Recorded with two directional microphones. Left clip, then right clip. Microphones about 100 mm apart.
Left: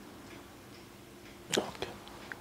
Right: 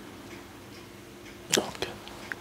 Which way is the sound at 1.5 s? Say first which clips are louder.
Right 6 dB; 15° right (ahead or behind).